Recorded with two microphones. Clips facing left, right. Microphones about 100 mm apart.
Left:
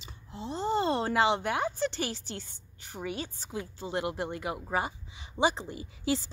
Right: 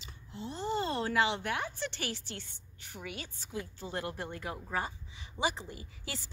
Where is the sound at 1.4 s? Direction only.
20° left (ahead or behind).